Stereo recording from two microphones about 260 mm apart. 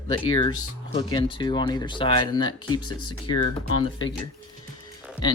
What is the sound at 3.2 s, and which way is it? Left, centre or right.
Speech, left.